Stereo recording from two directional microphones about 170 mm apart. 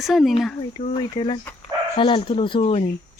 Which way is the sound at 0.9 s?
30° left (ahead or behind).